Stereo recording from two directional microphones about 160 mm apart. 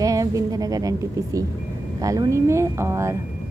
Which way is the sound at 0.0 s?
20° right (ahead or behind).